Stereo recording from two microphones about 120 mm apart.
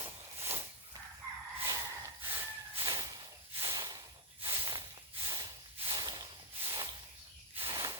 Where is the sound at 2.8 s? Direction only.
35° right (ahead or behind).